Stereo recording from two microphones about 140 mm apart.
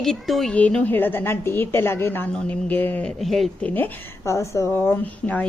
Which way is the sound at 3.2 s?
Centre (ahead or behind).